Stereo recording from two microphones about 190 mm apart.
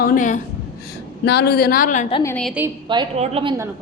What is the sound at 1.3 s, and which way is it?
Speech, 60° left (ahead or behind).